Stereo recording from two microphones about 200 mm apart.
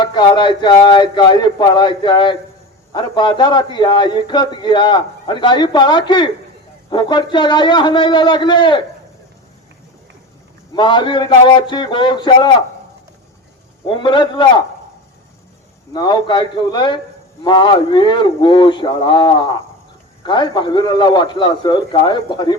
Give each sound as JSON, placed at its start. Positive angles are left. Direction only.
{"t": 0.0, "sound": "a man's voice", "side_deg": 20}
{"t": 10.8, "sound": "a man's voice", "side_deg": 25}
{"t": 13.8, "sound": "a man's voice", "side_deg": 25}
{"t": 15.9, "sound": "a man's voice", "side_deg": 20}